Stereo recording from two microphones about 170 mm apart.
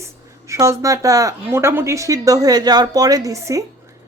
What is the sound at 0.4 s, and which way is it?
Speech, 15° right (ahead or behind).